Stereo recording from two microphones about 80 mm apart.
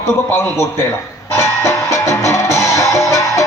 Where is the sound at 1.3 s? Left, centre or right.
Left.